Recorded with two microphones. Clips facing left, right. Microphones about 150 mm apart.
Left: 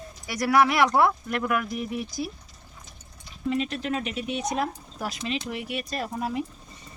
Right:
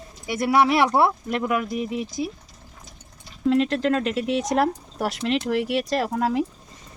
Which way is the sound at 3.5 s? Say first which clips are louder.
Right 7 dB; 90° right.